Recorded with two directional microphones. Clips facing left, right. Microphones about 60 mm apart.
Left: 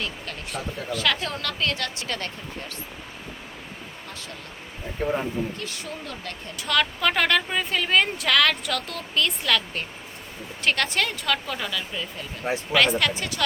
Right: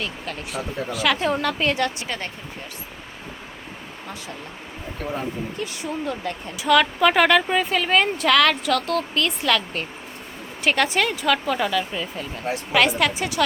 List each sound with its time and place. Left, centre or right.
0.0 s speech: centre
5.5 s a woman's voice: centre